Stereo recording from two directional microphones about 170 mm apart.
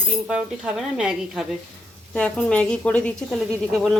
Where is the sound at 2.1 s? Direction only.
5° left (ahead or behind).